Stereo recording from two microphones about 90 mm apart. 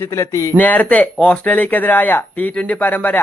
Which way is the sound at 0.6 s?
20° left (ahead or behind).